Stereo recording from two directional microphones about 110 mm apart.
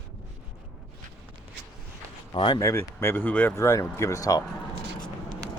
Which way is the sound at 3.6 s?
30° left (ahead or behind).